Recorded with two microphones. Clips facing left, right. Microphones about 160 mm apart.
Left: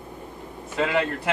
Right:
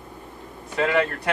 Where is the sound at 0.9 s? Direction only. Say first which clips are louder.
Right 3 dB; 15° left (ahead or behind).